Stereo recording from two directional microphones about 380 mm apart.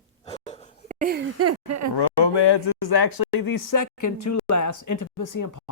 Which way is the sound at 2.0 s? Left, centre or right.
Left.